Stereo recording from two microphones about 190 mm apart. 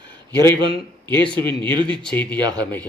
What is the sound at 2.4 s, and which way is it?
Speech, 20° right (ahead or behind).